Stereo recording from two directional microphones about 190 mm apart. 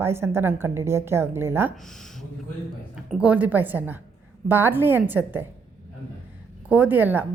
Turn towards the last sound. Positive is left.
turn(degrees=-10)  # may be behind; listen again after turning